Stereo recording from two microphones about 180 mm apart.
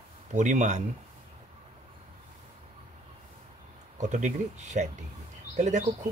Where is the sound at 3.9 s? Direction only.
40° right (ahead or behind).